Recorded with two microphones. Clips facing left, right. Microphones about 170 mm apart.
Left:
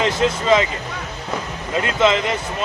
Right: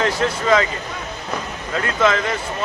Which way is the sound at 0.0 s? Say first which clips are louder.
Left 1 dB; 20° left (ahead or behind).